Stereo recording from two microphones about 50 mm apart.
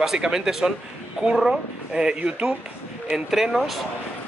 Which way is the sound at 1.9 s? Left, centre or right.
Centre.